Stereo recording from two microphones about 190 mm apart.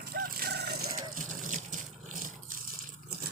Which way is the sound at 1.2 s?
45° right (ahead or behind).